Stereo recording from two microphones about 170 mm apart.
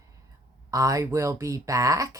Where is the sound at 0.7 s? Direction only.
20° right (ahead or behind).